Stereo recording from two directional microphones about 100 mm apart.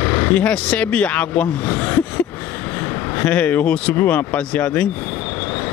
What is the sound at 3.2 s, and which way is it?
Speech, 15° left (ahead or behind).